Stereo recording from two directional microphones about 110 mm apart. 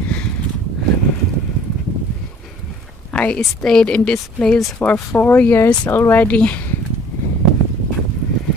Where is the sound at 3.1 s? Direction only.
10° left (ahead or behind).